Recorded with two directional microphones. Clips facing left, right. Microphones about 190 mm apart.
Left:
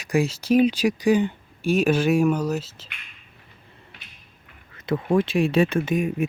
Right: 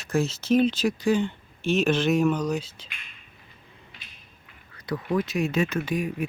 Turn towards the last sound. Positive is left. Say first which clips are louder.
# left 4 dB
turn(degrees=25)  # may be behind; listen again after turning